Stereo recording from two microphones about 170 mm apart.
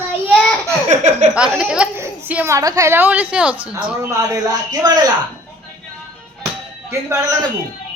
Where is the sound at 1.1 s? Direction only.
45° right (ahead or behind).